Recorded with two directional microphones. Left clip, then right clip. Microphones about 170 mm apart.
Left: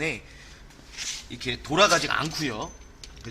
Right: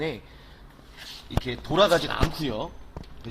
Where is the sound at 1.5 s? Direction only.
30° right (ahead or behind).